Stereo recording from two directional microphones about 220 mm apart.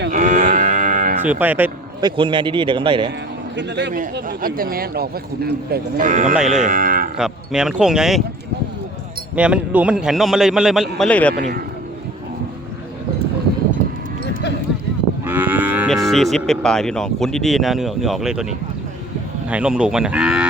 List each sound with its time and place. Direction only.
0.1 s moo: 35° right (ahead or behind)
1.2 s speech: 5° right (ahead or behind)
2.0 s a man's voice: 20° right (ahead or behind)
3.5 s a man's voice: 50° right (ahead or behind)
4.0 s speech: 40° right (ahead or behind)
6.3 s a man's voice: 5° right (ahead or behind)
6.7 s speech: 40° right (ahead or behind)
7.2 s a man's voice: 5° right (ahead or behind)
9.3 s a man's voice: 5° right (ahead or behind)
15.3 s moo: 5° right (ahead or behind)
19.5 s a man's voice: 5° right (ahead or behind)